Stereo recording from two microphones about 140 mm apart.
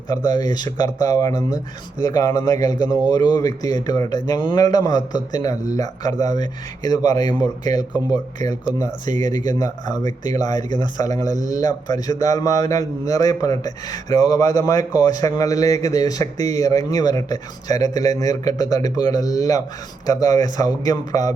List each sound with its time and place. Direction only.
0.3 s speech: 30° left (ahead or behind)